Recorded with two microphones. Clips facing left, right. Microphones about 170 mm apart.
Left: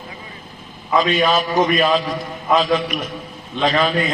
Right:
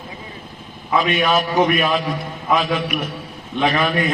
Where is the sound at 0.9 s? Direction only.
60° right (ahead or behind).